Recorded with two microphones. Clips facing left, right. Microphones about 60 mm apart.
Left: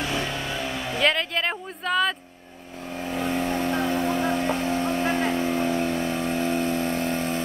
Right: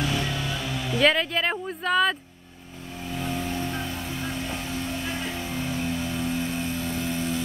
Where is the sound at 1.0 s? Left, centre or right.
Centre.